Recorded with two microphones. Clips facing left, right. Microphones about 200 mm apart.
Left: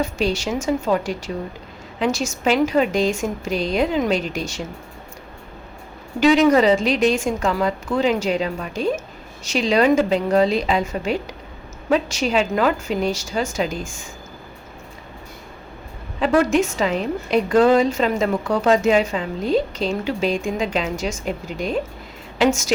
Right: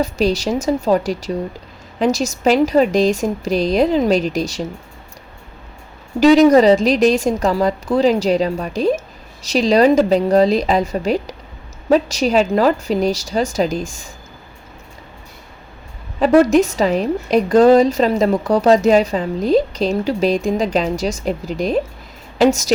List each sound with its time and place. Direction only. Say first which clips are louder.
0.0 s a woman's voice: right 4 dB; 40° right (ahead or behind)
6.1 s a woman's voice: right 5 dB; 40° right (ahead or behind)
16.4 s a woman's voice: right 5 dB; 40° right (ahead or behind)